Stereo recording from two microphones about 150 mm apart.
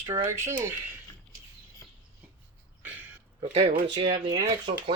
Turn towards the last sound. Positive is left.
turn(degrees=-40)  # may be behind; listen again after turning